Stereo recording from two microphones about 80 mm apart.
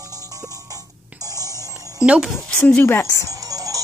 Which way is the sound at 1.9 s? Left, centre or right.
Centre.